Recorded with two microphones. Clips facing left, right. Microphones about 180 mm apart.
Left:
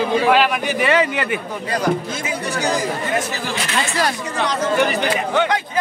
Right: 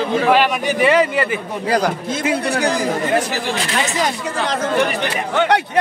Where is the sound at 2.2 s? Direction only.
60° right (ahead or behind).